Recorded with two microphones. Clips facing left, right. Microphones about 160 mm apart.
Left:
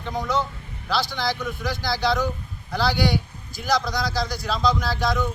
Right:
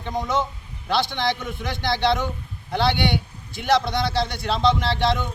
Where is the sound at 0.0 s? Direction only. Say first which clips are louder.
Right 1 dB; 20° right (ahead or behind).